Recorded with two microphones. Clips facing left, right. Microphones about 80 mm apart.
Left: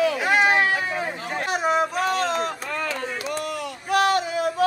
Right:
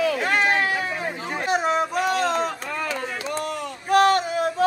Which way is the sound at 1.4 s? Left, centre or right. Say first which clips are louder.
Even; centre.